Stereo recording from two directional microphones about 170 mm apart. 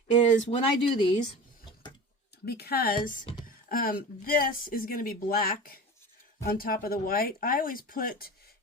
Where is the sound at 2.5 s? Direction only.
65° left (ahead or behind).